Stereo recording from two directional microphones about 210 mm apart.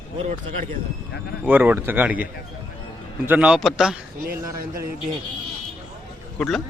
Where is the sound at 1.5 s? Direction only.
10° right (ahead or behind).